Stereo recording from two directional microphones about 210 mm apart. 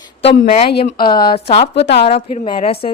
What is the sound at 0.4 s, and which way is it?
Speech, 35° left (ahead or behind).